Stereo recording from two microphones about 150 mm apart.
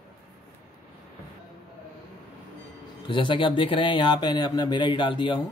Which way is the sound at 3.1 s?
35° left (ahead or behind).